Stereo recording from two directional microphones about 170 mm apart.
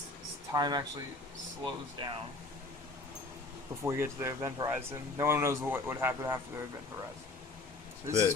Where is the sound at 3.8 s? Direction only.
15° right (ahead or behind).